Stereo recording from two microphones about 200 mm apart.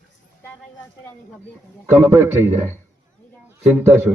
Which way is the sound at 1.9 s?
10° right (ahead or behind).